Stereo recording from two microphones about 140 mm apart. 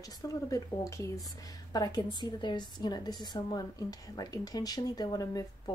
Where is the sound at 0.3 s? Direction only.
25° left (ahead or behind).